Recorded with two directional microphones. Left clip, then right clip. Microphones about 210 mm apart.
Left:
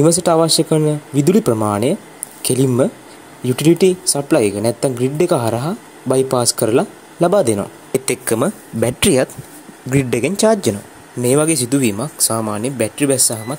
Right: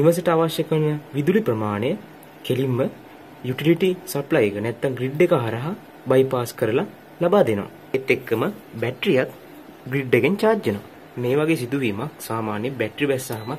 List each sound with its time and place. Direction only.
0.0 s speech: 40° left (ahead or behind)